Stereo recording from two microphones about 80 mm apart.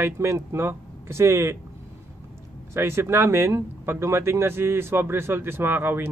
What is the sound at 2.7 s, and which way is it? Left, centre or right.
Speech, right.